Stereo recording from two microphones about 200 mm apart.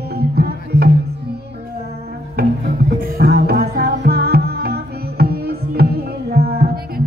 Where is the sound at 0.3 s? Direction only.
50° right (ahead or behind).